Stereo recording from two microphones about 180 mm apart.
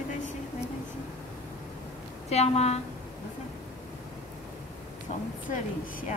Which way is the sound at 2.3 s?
35° left (ahead or behind).